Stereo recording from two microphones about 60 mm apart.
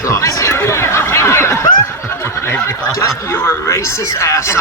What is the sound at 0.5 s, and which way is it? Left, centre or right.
Snicker, left.